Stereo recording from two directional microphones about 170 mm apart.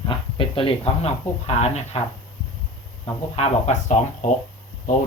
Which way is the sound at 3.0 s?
40° left (ahead or behind).